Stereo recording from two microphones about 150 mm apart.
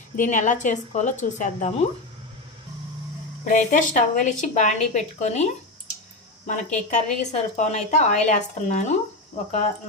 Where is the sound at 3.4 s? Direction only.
60° left (ahead or behind).